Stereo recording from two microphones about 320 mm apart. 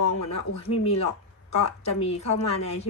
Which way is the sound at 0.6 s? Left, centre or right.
Centre.